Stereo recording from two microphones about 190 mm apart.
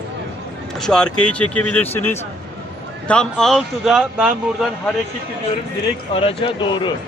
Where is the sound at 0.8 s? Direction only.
5° left (ahead or behind).